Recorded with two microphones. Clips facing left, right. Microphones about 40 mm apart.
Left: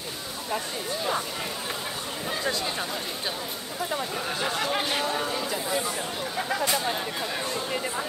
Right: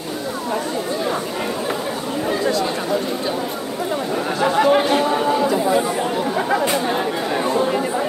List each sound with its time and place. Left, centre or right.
4.4 s chatter: centre
5.3 s chatter: right